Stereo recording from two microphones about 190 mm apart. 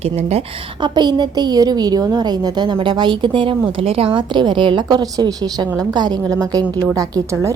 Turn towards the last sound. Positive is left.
turn(degrees=-15)  # may be behind; listen again after turning